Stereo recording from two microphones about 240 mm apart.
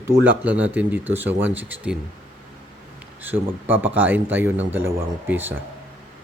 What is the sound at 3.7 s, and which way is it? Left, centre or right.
Speech, centre.